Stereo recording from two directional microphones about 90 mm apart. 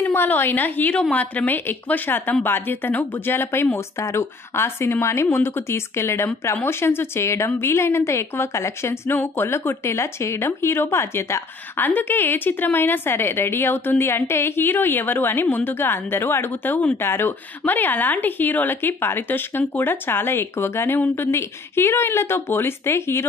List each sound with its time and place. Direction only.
0.0 s speech: 20° left (ahead or behind)